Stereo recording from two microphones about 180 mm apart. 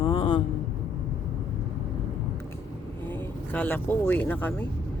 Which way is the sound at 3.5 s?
10° left (ahead or behind).